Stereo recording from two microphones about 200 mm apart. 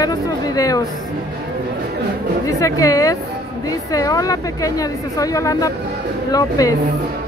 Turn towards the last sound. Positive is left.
turn(degrees=15)  # may be behind; listen again after turning